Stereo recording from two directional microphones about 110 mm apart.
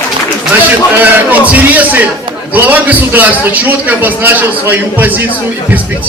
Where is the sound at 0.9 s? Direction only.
15° right (ahead or behind).